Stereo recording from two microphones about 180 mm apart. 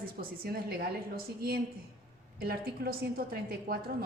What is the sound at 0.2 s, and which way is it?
A woman's voice, 55° right (ahead or behind).